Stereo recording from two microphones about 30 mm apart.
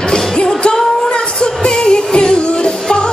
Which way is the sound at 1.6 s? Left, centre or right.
Left.